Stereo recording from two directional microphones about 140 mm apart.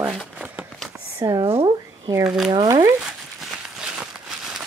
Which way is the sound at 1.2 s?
30° right (ahead or behind).